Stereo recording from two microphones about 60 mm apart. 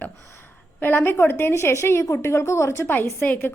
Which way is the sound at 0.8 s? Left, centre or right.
Left.